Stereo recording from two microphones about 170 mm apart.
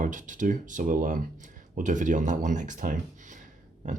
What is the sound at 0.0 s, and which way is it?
Speech, 50° right (ahead or behind).